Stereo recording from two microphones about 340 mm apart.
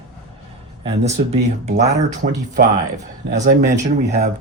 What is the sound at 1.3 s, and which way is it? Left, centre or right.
Speech, right.